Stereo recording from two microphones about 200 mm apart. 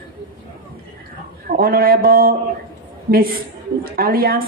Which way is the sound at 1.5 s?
45° right (ahead or behind).